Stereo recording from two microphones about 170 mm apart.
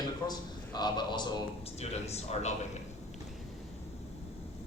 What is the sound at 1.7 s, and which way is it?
Speech, 40° left (ahead or behind).